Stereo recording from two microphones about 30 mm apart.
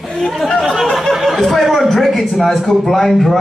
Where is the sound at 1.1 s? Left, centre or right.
Centre.